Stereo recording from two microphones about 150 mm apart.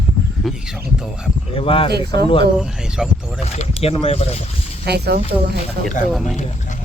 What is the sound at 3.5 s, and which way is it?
Speech, 40° left (ahead or behind).